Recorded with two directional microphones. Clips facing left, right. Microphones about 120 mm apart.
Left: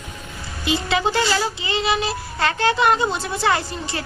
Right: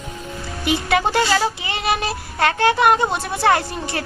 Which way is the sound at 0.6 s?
55° right (ahead or behind).